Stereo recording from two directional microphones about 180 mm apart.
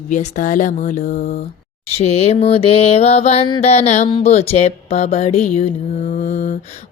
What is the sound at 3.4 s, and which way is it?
Mantra, 25° left (ahead or behind).